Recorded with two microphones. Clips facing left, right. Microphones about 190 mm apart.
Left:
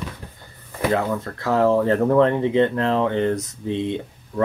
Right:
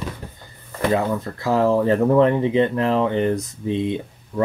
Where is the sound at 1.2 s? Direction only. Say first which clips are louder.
Even; 10° right (ahead or behind).